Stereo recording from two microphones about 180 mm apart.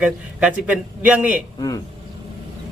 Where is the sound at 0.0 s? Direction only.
5° right (ahead or behind).